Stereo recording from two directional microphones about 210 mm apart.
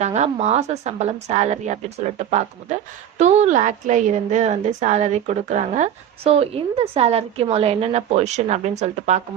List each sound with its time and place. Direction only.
0.0 s a woman's voice: 35° right (ahead or behind)